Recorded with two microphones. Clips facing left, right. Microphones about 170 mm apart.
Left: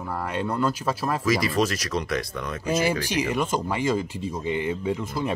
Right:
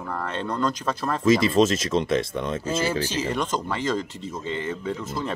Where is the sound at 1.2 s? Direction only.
25° right (ahead or behind).